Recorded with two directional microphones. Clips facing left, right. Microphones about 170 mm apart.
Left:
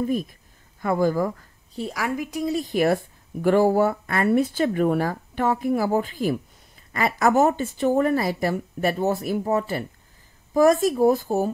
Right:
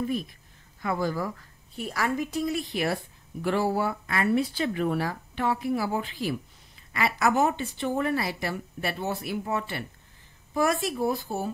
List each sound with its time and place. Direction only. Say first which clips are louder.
0.0 s speech: left 5 dB; 45° left (ahead or behind)
2.0 s a woman's voice: right 1 dB; 10° left (ahead or behind)
2.4 s a woman's voice: left 6 dB; 40° left (ahead or behind)